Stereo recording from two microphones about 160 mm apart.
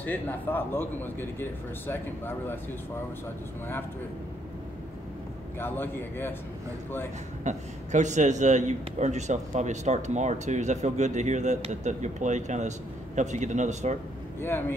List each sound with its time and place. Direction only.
0.0 s a man's voice: 10° left (ahead or behind)
5.6 s a man's voice: 15° left (ahead or behind)
7.4 s a man's voice: 50° right (ahead or behind)